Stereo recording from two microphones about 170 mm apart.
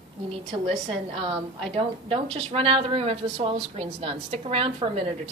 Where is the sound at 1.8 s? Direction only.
35° right (ahead or behind).